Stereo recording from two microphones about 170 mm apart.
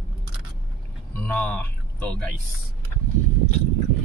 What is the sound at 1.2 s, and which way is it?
Speech, 10° left (ahead or behind).